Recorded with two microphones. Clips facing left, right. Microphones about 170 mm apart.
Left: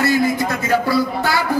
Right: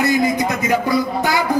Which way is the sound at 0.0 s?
20° right (ahead or behind).